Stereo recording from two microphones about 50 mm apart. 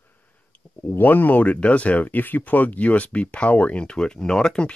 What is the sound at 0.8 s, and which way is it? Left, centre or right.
Speech, left.